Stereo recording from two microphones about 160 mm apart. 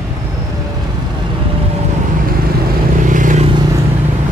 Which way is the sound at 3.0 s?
55° right (ahead or behind).